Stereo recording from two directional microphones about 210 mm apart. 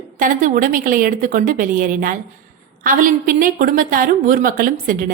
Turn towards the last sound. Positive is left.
turn(degrees=-40)  # may be behind; listen again after turning